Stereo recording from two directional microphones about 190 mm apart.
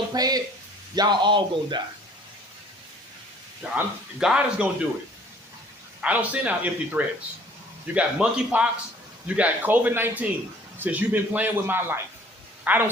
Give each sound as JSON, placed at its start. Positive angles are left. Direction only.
{"t": 0.1, "sound": "a sound", "side_deg": -20}
{"t": 0.9, "sound": "speech", "side_deg": -20}
{"t": 3.6, "sound": "speech", "side_deg": -5}
{"t": 6.0, "sound": "a man's voice", "side_deg": -5}